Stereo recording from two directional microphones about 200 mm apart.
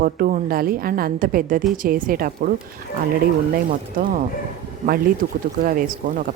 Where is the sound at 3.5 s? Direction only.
45° right (ahead or behind).